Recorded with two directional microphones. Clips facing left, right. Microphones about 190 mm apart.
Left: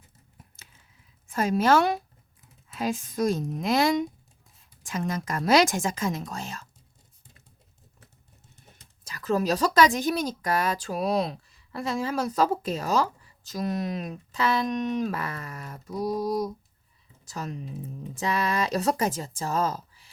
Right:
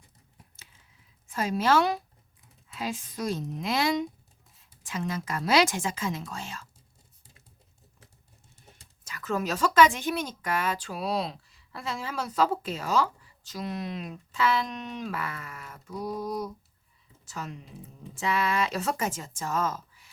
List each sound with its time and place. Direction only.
1.3 s a woman's voice: 45° left (ahead or behind)
9.0 s a woman's voice: 35° left (ahead or behind)